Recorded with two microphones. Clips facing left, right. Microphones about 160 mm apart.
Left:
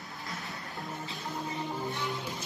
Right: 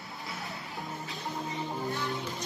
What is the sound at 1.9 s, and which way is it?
Music, 20° left (ahead or behind).